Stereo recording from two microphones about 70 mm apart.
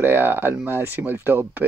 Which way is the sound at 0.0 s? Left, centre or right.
Right.